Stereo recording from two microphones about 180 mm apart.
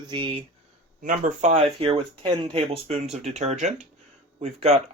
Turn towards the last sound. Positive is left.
turn(degrees=-35)  # may be behind; listen again after turning